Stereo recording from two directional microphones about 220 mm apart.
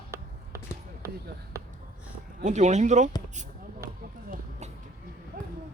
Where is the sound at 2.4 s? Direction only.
30° right (ahead or behind).